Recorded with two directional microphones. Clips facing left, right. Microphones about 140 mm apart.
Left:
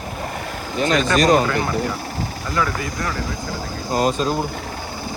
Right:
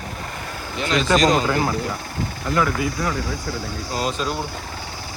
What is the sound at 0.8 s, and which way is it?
Speech, 45° left (ahead or behind).